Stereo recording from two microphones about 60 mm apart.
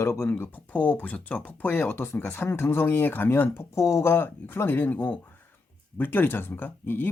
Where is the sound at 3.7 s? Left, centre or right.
Left.